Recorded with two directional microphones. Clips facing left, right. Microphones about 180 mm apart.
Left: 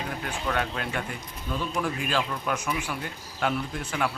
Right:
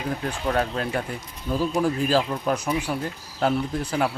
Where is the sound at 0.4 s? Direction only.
35° right (ahead or behind).